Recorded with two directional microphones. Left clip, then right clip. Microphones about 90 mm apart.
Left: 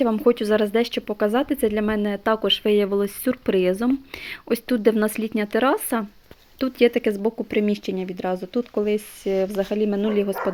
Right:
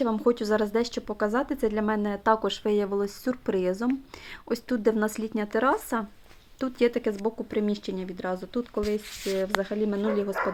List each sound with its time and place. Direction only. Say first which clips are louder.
0.2 s speech: left 5 dB; 25° left (ahead or behind)
2.6 s speech: left 3 dB; 25° left (ahead or behind)
9.4 s speech: left 4 dB; 20° left (ahead or behind)